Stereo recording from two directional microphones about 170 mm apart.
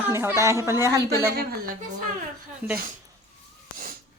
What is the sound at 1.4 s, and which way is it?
Speech, 65° right (ahead or behind).